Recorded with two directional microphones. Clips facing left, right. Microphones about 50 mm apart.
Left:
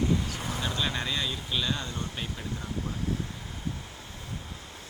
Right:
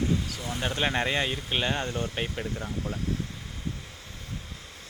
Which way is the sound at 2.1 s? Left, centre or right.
Right.